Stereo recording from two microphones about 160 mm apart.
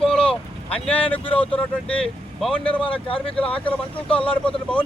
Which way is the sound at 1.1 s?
35° left (ahead or behind).